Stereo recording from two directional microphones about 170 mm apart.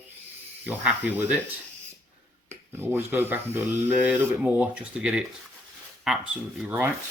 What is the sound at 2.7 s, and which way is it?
Speech, 15° right (ahead or behind).